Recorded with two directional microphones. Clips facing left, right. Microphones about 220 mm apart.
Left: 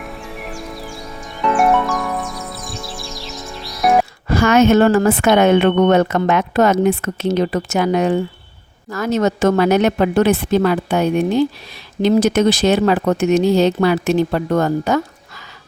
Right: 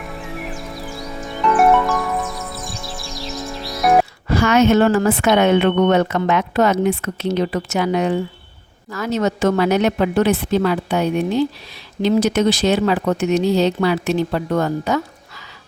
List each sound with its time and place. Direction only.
0.0 s music: centre (ahead or behind)
4.3 s speech: 50° left (ahead or behind)